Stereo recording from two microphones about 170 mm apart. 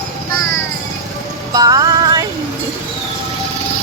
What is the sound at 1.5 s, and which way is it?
Music, 20° right (ahead or behind).